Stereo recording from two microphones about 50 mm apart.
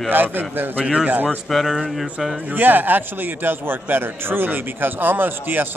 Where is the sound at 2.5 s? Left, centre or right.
Right.